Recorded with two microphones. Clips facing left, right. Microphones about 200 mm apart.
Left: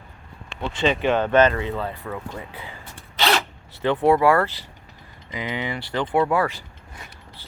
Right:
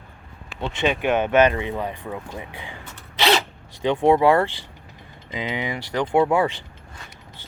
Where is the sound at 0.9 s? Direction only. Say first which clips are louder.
Left 1 dB; 15° right (ahead or behind).